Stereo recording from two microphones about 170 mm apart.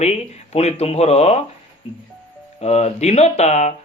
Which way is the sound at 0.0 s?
40° left (ahead or behind).